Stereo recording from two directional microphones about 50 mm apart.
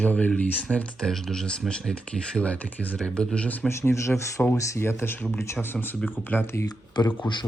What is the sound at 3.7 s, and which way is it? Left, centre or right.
Speech, left.